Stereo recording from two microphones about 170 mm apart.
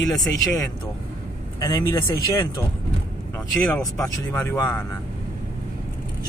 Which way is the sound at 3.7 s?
15° left (ahead or behind).